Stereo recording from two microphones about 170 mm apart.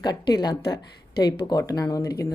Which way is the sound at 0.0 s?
25° left (ahead or behind).